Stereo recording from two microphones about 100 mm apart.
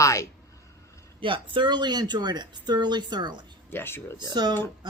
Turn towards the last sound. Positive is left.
turn(degrees=-45)  # may be behind; listen again after turning